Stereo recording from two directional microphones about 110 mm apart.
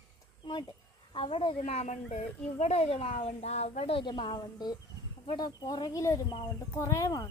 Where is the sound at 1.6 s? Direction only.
90° left; by 4.0 s 65° left (ahead or behind).